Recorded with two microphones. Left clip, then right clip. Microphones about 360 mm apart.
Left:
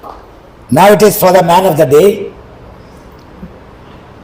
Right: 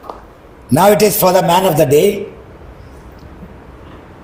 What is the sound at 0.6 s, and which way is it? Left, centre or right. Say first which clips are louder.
A man's voice: left 4 dB; right.